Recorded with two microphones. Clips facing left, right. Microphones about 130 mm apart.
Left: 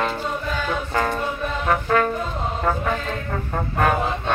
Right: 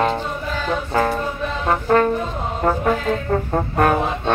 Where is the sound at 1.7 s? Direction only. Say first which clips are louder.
Right 3 dB; 25° right (ahead or behind).